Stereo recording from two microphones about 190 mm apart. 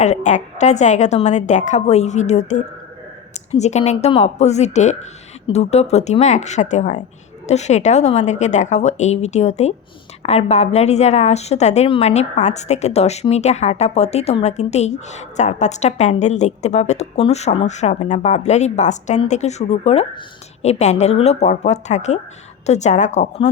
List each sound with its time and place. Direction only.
0.0 s a woman's voice: 40° left (ahead or behind)